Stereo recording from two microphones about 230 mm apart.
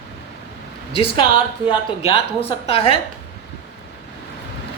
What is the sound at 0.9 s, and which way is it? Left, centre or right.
A woman's voice, left.